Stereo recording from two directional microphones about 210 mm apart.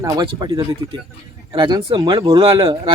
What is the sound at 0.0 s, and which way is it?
Speech, 20° right (ahead or behind).